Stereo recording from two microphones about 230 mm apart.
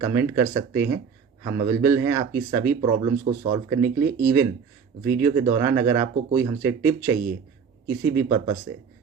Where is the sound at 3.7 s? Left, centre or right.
Right.